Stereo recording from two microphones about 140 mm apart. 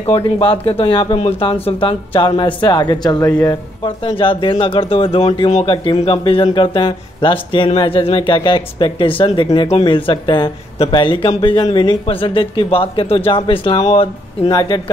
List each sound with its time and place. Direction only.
0.0 s speech: 40° left (ahead or behind)
5.7 s speech: 35° left (ahead or behind)
14.5 s speech: 30° left (ahead or behind)